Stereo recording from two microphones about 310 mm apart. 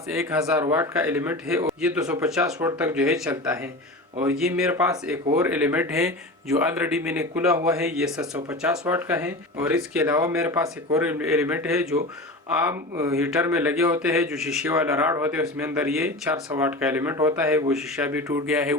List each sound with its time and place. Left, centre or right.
0.1 s speech: centre